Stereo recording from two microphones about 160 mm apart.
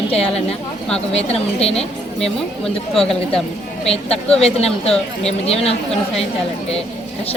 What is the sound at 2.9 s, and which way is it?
Speech, 5° left (ahead or behind).